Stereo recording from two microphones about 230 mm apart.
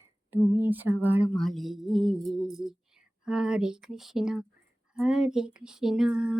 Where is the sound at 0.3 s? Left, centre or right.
Centre.